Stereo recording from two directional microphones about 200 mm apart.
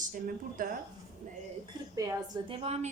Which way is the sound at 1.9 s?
20° right (ahead or behind).